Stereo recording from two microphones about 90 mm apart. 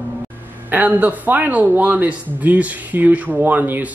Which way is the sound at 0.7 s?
20° right (ahead or behind).